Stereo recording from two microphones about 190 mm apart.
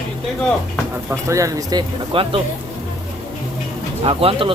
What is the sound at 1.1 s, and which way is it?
Speech, 15° right (ahead or behind).